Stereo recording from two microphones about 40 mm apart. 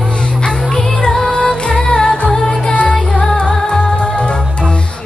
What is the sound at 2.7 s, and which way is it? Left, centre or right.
Music, left.